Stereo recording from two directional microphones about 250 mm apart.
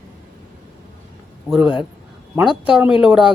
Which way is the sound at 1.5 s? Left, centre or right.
Centre.